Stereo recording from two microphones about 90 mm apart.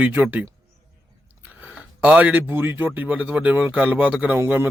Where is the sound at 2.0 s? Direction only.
15° right (ahead or behind).